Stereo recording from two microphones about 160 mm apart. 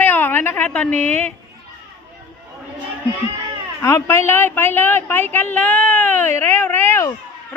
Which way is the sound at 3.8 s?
15° left (ahead or behind).